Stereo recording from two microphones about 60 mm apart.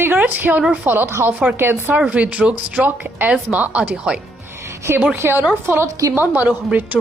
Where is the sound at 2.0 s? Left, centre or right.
Right.